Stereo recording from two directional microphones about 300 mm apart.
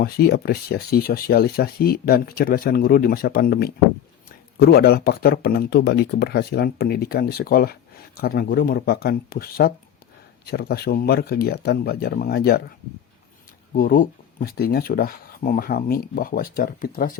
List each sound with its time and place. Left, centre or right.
0.0 s speech: left
13.7 s speech: left